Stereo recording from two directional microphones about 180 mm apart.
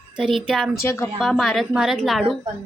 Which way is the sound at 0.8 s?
15° left (ahead or behind).